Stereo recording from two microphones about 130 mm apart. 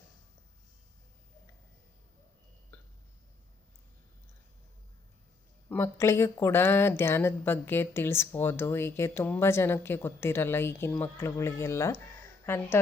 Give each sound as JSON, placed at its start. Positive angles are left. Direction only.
{"t": 2.7, "sound": "hiccup", "side_deg": 15}
{"t": 5.6, "sound": "speech", "side_deg": 20}